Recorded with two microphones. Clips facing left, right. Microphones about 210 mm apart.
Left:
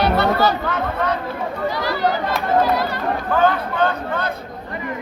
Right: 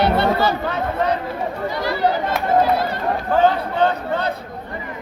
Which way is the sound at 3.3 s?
30° right (ahead or behind).